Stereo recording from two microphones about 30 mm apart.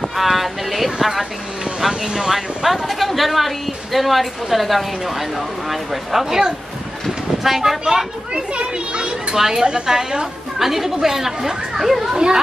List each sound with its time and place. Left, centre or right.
0.2 s speech: centre
5.7 s speech: centre
8.4 s a child's voice: right
9.3 s a woman's voice: centre